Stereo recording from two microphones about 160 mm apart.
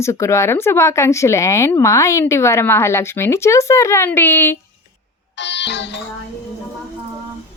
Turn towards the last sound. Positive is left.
turn(degrees=90)